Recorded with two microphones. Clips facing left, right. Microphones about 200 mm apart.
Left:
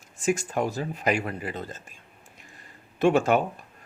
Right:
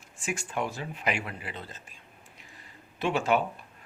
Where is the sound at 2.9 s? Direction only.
45° left (ahead or behind).